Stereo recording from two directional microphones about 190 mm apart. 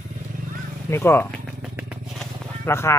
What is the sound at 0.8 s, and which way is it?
Speech, 15° left (ahead or behind).